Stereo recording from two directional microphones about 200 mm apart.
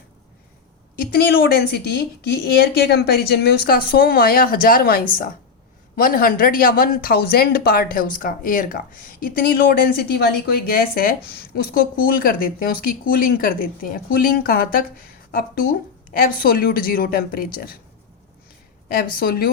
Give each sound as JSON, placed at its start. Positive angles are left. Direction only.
{"t": 0.9, "sound": "speech", "side_deg": 50}
{"t": 18.9, "sound": "speech", "side_deg": 45}